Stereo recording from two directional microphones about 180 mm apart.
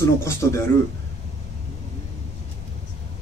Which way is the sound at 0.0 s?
15° left (ahead or behind).